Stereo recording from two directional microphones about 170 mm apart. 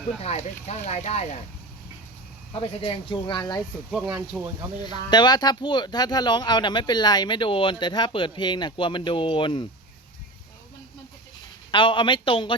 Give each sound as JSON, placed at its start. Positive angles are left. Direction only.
{"t": 0.2, "sound": "speech", "side_deg": 40}
{"t": 2.5, "sound": "speech", "side_deg": 30}
{"t": 3.9, "sound": "speech", "side_deg": -5}
{"t": 4.9, "sound": "speech", "side_deg": 25}
{"t": 11.7, "sound": "speech", "side_deg": 30}